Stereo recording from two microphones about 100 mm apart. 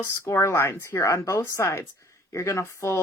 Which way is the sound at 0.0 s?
25° left (ahead or behind).